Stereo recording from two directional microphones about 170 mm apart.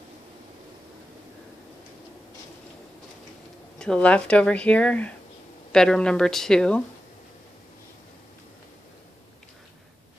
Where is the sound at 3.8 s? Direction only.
5° left (ahead or behind).